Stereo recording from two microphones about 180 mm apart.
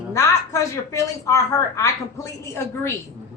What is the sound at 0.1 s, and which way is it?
A woman's voice, 15° left (ahead or behind).